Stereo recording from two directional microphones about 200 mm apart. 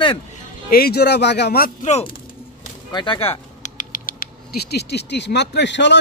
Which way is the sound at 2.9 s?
25° left (ahead or behind).